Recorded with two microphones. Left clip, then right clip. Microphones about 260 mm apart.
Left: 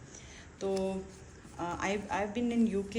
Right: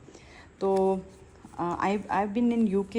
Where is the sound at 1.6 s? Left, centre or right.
Right.